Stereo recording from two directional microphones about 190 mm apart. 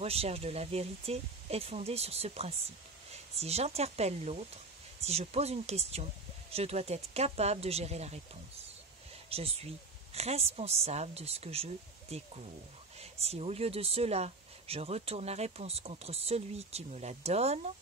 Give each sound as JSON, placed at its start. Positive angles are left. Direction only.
{"t": 0.0, "sound": "speech", "side_deg": -30}
{"t": 9.3, "sound": "speech", "side_deg": -30}